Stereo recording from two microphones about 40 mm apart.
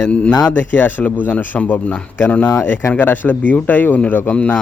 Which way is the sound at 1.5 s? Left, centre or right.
Left.